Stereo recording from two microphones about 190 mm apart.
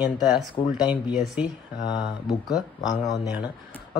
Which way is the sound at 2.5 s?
20° left (ahead or behind).